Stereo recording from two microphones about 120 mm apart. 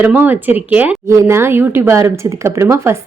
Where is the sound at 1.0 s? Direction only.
25° right (ahead or behind).